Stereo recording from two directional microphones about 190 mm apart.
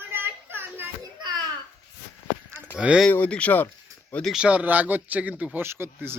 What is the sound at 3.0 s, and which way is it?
Speech, 5° left (ahead or behind).